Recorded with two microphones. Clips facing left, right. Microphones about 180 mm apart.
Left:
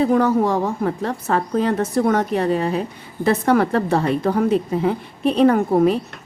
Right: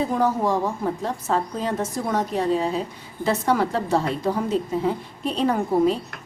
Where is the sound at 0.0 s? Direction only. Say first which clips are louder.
Left 5 dB; 65° left (ahead or behind).